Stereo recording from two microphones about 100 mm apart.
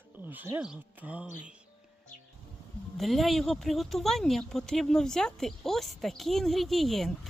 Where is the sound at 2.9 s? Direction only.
Centre (ahead or behind).